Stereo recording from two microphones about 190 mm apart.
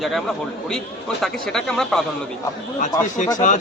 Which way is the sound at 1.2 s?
5° left (ahead or behind).